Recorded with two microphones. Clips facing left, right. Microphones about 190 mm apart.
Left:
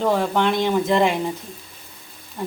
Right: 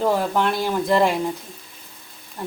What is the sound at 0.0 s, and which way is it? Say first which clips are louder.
Speech: left 1 dB; 5° right (ahead or behind).